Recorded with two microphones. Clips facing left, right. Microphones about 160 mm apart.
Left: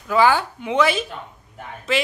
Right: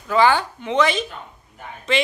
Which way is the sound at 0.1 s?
5° left (ahead or behind).